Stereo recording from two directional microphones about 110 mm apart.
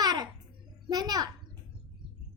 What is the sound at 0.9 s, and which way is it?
Speech, 35° right (ahead or behind).